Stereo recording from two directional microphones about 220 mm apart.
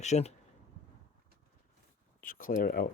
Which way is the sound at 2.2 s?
40° left (ahead or behind).